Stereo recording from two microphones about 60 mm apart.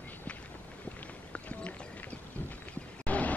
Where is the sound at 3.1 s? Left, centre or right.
Left.